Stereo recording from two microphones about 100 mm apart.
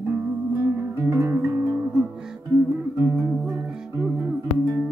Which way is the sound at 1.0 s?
30° right (ahead or behind).